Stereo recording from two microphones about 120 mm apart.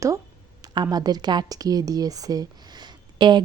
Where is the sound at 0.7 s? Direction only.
35° right (ahead or behind).